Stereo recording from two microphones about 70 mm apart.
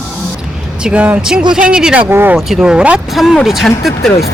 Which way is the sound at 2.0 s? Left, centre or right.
Right.